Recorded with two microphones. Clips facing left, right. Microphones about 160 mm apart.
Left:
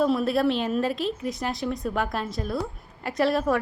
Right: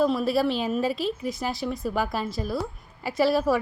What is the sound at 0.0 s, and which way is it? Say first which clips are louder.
A woman's voice: even; centre (ahead or behind).